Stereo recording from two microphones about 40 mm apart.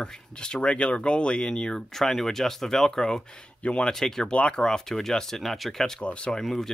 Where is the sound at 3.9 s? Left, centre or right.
Centre.